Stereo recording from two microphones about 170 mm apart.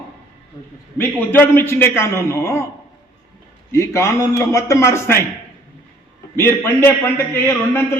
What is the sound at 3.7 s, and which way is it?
A man's voice, 15° left (ahead or behind).